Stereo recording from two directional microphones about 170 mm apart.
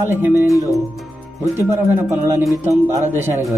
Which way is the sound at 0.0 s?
15° right (ahead or behind).